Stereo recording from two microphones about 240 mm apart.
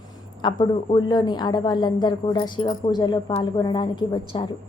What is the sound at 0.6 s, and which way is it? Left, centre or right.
A woman's voice, centre.